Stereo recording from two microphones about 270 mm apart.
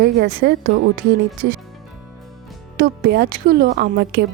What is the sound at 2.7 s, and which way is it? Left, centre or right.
A woman's voice, right.